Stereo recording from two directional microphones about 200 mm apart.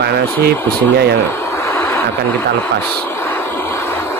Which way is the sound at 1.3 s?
15° left (ahead or behind).